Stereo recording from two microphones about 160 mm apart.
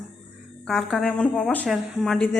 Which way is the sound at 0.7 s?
Centre (ahead or behind).